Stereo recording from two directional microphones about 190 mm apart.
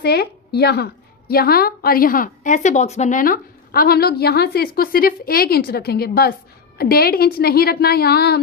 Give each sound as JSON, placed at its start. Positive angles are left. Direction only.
{"t": 0.0, "sound": "a woman's voice", "side_deg": 55}